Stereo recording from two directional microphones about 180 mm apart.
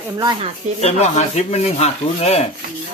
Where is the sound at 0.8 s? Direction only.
35° left (ahead or behind).